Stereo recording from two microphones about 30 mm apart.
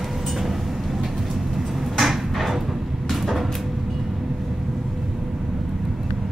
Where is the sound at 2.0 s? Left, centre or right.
Centre.